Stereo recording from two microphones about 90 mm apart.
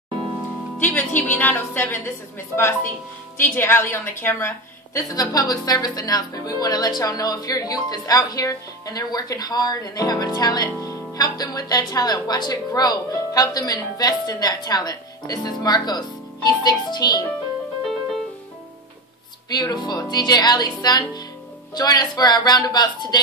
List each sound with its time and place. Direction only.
0.7 s a woman's voice: 20° left (ahead or behind)
5.1 s speech: 45° left (ahead or behind)
19.5 s speech: 50° left (ahead or behind)